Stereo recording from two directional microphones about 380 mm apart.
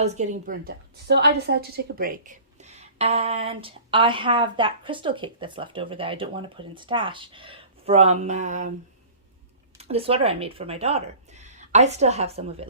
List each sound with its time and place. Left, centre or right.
0.0 s a woman's voice: centre
9.7 s speech: centre